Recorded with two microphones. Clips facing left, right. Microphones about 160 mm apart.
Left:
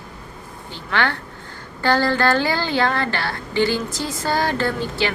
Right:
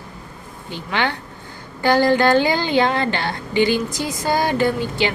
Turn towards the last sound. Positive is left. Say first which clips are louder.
# right 3 dB
turn(degrees=-15)  # may be behind; listen again after turning